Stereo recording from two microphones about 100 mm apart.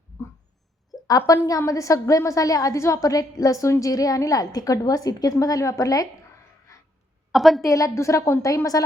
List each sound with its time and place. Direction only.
0.9 s a sound: 40° left (ahead or behind)
1.3 s a woman's voice: 35° left (ahead or behind)
7.3 s a woman's voice: centre (ahead or behind)
7.6 s a woman's voice: 35° left (ahead or behind)